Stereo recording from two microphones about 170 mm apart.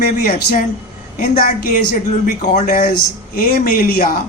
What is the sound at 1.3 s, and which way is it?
A man's voice, 45° left (ahead or behind).